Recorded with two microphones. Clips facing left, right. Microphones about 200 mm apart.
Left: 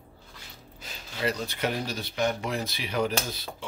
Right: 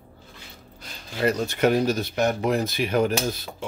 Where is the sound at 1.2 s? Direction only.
45° right (ahead or behind).